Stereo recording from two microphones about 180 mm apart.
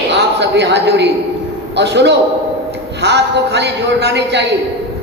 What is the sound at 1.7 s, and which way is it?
A man's voice, 70° right (ahead or behind).